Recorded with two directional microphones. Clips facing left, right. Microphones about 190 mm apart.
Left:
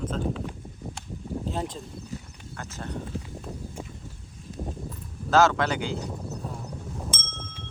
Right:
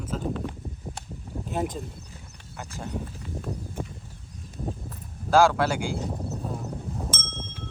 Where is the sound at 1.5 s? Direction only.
15° right (ahead or behind).